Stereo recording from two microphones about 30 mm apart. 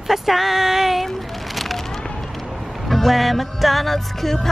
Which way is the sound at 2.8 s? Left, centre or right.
Centre.